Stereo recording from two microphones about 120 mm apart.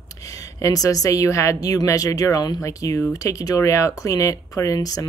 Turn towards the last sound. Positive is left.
turn(degrees=30)  # may be behind; listen again after turning